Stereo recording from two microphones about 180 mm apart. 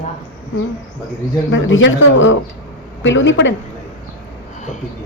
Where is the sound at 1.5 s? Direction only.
90° left.